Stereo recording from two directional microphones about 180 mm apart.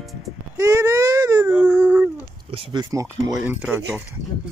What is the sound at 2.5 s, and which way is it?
Speech, 25° right (ahead or behind).